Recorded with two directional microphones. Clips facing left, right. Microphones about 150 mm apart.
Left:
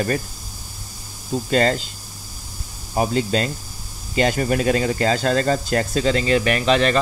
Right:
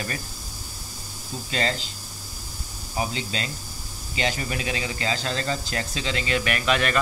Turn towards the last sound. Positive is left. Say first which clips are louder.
# left 6 dB
turn(degrees=30)  # may be behind; listen again after turning